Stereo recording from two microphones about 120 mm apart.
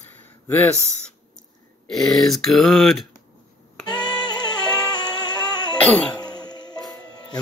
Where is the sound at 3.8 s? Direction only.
35° left (ahead or behind).